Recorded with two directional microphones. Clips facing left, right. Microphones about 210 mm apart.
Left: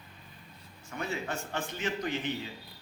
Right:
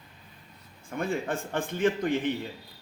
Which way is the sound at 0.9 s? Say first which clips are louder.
Right 6 dB; 50° right (ahead or behind).